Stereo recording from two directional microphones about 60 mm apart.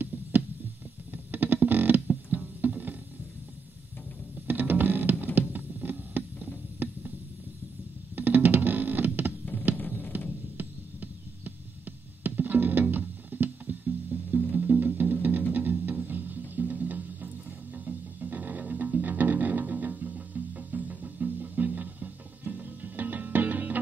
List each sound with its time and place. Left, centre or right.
1.1 s music: right
4.5 s music: right
5.5 s a sound: right
8.2 s music: right
9.8 s music: left
10.6 s throbbing: right
15.5 s music: right